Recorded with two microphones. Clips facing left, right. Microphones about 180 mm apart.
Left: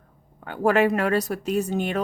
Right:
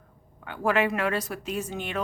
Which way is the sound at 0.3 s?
40° left (ahead or behind).